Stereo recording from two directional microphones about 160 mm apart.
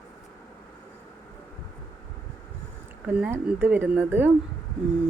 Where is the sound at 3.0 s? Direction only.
10° right (ahead or behind).